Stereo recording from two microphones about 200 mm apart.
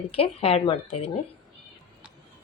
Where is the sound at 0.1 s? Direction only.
30° left (ahead or behind).